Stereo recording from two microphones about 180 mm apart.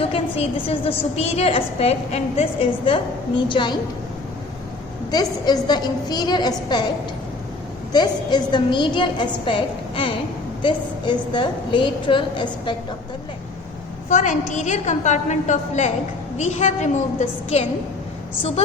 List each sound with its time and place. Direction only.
0.1 s a woman's voice: 35° left (ahead or behind)
5.1 s a woman's voice: 25° left (ahead or behind)
7.9 s a woman's voice: 25° left (ahead or behind)
14.1 s a woman's voice: 40° left (ahead or behind)